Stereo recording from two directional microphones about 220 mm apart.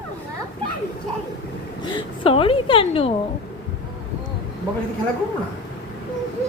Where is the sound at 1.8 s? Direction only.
20° left (ahead or behind).